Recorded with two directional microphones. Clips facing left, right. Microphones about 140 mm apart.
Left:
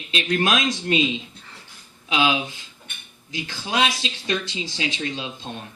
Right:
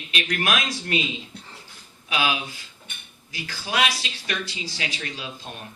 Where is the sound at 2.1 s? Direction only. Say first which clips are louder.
Left 4 dB; 25° left (ahead or behind).